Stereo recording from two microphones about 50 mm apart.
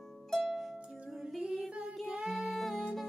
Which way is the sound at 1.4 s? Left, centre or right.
Centre.